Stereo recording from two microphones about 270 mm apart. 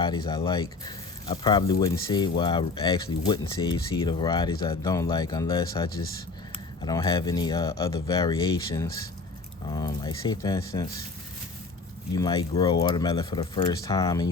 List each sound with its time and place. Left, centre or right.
0.0 s speech: centre
12.1 s speech: centre